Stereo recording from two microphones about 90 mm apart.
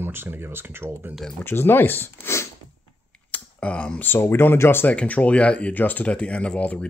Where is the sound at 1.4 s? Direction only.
25° left (ahead or behind).